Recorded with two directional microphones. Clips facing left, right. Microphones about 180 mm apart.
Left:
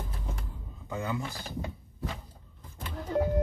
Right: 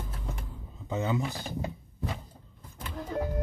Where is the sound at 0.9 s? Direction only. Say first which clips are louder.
Right 4 dB; 20° right (ahead or behind).